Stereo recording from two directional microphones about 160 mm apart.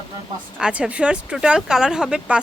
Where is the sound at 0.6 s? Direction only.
5° right (ahead or behind).